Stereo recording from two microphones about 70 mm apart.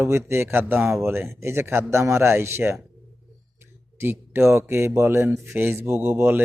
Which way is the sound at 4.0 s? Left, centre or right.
Right.